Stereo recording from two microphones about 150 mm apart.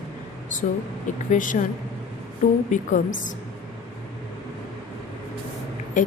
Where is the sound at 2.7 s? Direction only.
55° left (ahead or behind).